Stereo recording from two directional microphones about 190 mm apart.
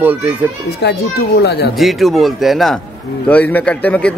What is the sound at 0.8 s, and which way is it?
Speech, 65° left (ahead or behind).